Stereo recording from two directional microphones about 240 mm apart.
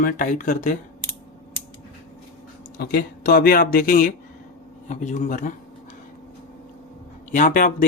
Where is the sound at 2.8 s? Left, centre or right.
Left.